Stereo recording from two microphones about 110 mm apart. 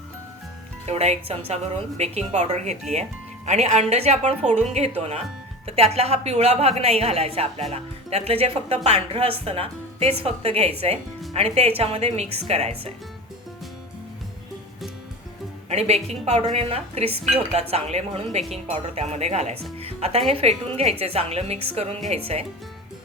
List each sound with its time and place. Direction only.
0.9 s a woman's voice: 75° right (ahead or behind)
4.9 s a woman's voice: 70° right (ahead or behind)
15.7 s a woman's voice: 75° right (ahead or behind)
19.8 s a woman's voice: 65° right (ahead or behind)